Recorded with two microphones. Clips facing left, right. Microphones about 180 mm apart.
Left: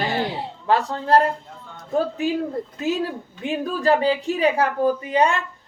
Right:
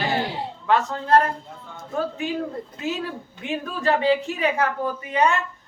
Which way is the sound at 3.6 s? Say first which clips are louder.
Left 3 dB; 35° left (ahead or behind).